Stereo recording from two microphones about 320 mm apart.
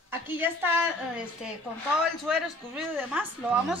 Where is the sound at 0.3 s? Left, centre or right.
Centre.